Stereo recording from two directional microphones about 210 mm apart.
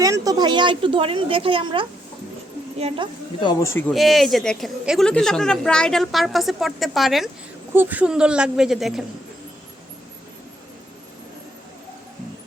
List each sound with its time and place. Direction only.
0.0 s a woman's voice: 15° right (ahead or behind)
3.4 s speech: 15° left (ahead or behind)
3.9 s speech: centre (ahead or behind)